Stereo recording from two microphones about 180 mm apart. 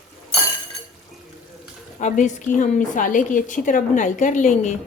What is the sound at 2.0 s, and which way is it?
Speech, 45° left (ahead or behind).